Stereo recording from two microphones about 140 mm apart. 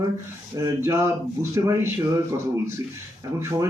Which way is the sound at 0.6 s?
20° right (ahead or behind).